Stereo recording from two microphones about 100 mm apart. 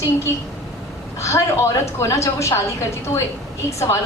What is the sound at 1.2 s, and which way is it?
Speech, 30° left (ahead or behind).